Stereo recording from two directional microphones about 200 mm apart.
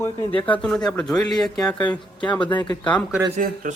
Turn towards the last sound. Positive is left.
turn(degrees=-40)  # may be behind; listen again after turning